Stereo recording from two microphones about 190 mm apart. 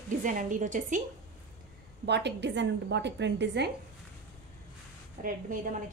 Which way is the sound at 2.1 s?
65° right (ahead or behind).